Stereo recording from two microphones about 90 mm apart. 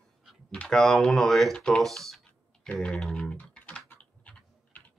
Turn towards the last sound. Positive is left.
turn(degrees=15)  # may be behind; listen again after turning